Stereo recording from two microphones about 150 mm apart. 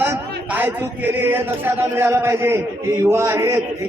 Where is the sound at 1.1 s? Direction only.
15° right (ahead or behind).